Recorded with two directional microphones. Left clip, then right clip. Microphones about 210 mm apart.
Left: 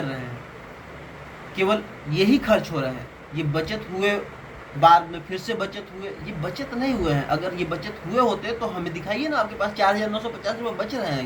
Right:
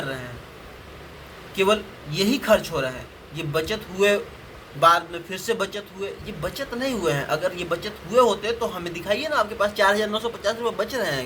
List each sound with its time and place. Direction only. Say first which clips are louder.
1.5 s speech: right 2 dB; 45° right (ahead or behind)